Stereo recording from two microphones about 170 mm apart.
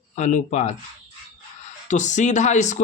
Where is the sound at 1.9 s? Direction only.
45° left (ahead or behind).